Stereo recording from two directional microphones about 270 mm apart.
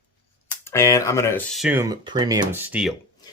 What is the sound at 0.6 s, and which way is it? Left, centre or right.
Speech, centre.